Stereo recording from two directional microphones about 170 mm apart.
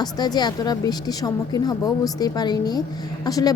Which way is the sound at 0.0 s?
25° left (ahead or behind).